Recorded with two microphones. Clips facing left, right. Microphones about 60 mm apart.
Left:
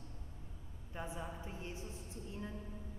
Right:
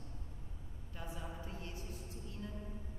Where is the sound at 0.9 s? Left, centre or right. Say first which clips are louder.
Left 3 dB; left.